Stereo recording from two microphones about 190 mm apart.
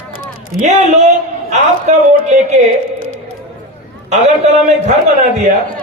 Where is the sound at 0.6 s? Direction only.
40° right (ahead or behind).